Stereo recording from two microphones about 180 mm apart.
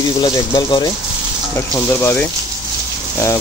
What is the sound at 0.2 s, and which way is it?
Speech, 25° left (ahead or behind).